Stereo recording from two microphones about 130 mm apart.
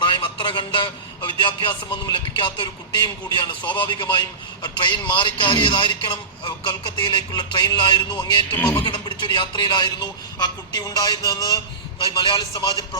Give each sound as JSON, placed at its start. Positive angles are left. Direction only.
{"t": 0.0, "sound": "a man's voice", "side_deg": 40}
{"t": 8.5, "sound": "speech", "side_deg": 15}
{"t": 8.8, "sound": "a man's voice", "side_deg": 35}